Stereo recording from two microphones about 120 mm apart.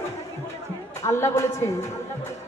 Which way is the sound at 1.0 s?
25° left (ahead or behind).